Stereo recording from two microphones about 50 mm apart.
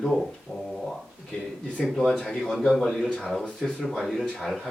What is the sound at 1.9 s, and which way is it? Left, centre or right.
Speech, centre.